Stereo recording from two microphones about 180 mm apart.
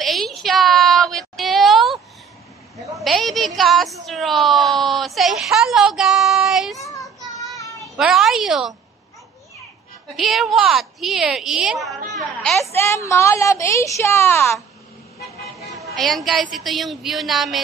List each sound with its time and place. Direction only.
0.0 s a sound: centre (ahead or behind)
3.0 s a woman's voice: centre (ahead or behind)
6.8 s child singing: 20° left (ahead or behind)
8.0 s a woman's voice: centre (ahead or behind)
10.1 s a woman's voice: centre (ahead or behind)
12.7 s a woman's voice: 15° left (ahead or behind)
15.8 s a woman's voice: centre (ahead or behind)